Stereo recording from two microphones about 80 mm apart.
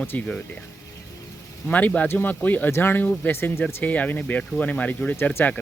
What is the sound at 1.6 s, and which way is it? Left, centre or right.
Speech, centre.